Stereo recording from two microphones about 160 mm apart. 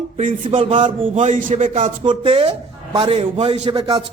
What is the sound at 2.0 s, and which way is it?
A man's voice, 35° right (ahead or behind).